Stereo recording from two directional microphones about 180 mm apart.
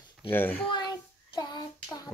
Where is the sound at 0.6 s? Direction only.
25° left (ahead or behind).